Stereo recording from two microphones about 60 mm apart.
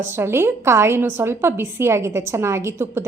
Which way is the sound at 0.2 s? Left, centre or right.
Right.